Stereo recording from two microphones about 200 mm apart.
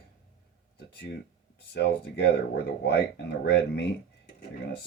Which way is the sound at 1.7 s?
55° left (ahead or behind).